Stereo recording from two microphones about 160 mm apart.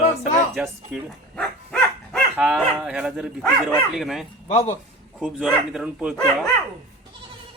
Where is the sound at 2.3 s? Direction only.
5° right (ahead or behind).